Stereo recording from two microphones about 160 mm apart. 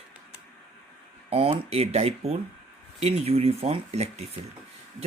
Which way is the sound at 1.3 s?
40° right (ahead or behind).